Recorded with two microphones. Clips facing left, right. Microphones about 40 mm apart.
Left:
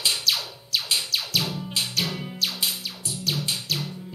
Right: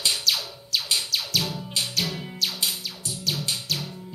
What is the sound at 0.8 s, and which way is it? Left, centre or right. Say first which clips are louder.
Music: even; left.